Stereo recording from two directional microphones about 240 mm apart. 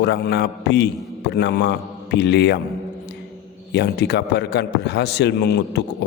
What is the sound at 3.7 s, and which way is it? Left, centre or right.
A man's voice, left.